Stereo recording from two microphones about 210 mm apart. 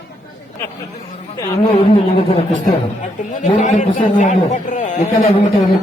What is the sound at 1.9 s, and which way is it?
A man's voice, 30° left (ahead or behind).